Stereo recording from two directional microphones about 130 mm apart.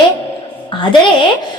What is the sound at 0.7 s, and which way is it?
Speech, 40° left (ahead or behind).